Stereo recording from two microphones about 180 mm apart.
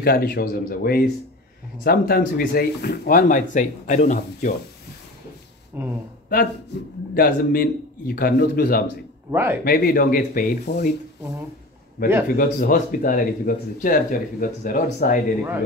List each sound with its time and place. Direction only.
0.0 s a man's voice: 55° left (ahead or behind)
5.7 s a man's voice: 10° right (ahead or behind)
7.2 s a man's voice: 55° left (ahead or behind)
9.3 s a man's voice: 10° right (ahead or behind)
9.7 s a man's voice: 60° left (ahead or behind)
12.0 s a man's voice: 55° left (ahead or behind)